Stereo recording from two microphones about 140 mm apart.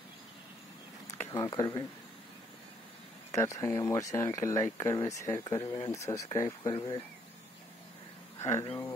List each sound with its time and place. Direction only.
1.3 s speech: 30° left (ahead or behind)
3.3 s speech: 20° left (ahead or behind)
6.7 s speech: 35° left (ahead or behind)
8.4 s speech: 20° left (ahead or behind)